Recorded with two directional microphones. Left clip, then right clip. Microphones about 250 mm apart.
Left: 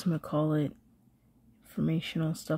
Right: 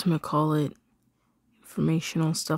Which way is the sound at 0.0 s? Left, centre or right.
Centre.